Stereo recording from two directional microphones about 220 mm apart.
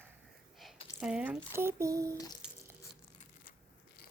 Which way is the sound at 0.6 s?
Centre (ahead or behind).